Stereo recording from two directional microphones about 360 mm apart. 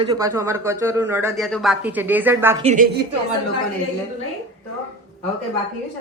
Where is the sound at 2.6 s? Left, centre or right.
Right.